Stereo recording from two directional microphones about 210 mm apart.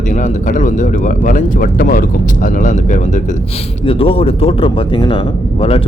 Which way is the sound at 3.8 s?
25° left (ahead or behind).